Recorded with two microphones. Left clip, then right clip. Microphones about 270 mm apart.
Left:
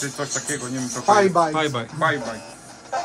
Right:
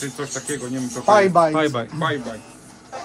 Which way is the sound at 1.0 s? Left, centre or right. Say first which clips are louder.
Right 2 dB; right.